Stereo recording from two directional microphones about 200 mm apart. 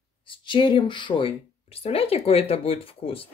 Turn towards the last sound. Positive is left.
turn(degrees=30)  # may be behind; listen again after turning